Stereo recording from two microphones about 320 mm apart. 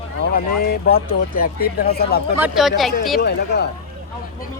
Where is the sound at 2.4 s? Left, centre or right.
Centre.